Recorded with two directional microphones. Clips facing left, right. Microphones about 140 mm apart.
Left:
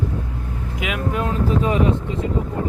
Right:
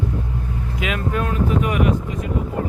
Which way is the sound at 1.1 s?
25° left (ahead or behind).